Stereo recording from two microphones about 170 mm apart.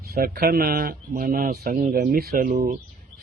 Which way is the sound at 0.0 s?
65° right (ahead or behind).